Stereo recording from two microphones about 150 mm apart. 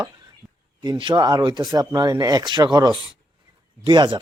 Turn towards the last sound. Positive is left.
turn(degrees=-30)  # may be behind; listen again after turning